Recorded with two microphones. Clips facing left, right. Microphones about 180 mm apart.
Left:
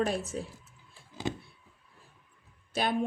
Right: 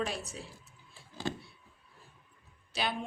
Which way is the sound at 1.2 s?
20° left (ahead or behind).